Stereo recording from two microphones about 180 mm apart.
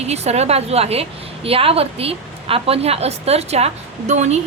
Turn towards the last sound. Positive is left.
turn(degrees=-40)  # may be behind; listen again after turning